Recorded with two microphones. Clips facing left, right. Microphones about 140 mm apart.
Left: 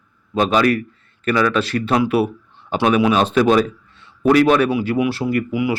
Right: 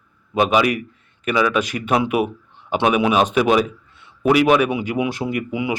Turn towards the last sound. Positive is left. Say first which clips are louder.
# left 3 dB
turn(degrees=-20)  # may be behind; listen again after turning